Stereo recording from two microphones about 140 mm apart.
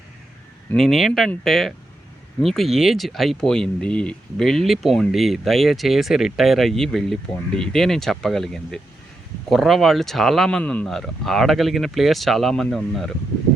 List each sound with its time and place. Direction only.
0.8 s speech: centre (ahead or behind)